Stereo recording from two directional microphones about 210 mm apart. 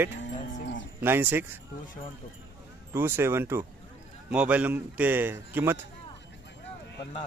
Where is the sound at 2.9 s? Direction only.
10° right (ahead or behind).